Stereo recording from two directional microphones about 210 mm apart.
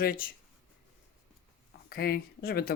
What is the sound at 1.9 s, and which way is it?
Speech, 45° left (ahead or behind).